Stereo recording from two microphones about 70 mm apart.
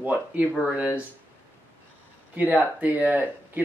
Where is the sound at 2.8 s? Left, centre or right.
Right.